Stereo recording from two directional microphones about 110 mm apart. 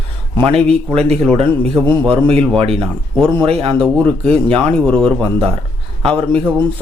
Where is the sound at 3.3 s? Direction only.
55° right (ahead or behind).